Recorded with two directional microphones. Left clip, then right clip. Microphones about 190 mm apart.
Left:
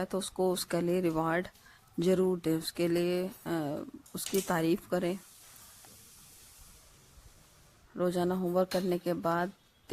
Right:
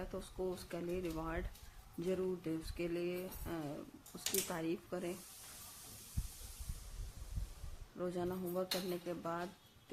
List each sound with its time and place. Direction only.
0.0 s speech: 55° left (ahead or behind)
7.9 s speech: 50° left (ahead or behind)